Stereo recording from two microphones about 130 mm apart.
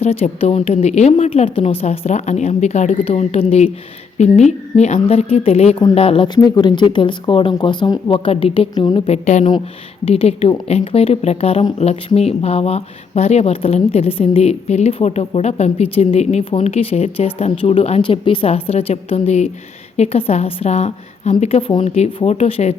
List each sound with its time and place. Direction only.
0.0 s a woman's voice: 50° left (ahead or behind)
2.9 s a woman's voice: 50° left (ahead or behind)
6.2 s speech: 30° left (ahead or behind)
8.7 s speech: 35° left (ahead or behind)
9.0 s a woman's voice: 60° left (ahead or behind)
10.1 s a woman's voice: 50° left (ahead or behind)